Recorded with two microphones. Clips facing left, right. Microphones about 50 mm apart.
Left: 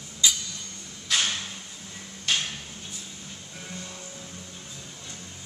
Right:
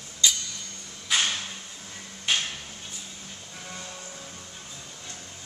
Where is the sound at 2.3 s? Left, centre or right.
Centre.